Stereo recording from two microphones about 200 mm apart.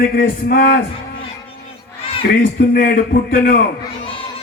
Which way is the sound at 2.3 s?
45° left (ahead or behind).